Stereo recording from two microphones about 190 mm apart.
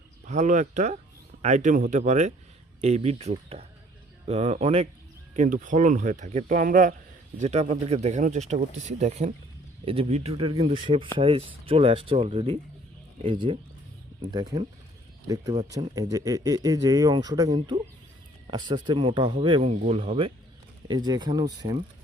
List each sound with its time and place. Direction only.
0.3 s speech: 40° right (ahead or behind)
7.3 s speech: 35° right (ahead or behind)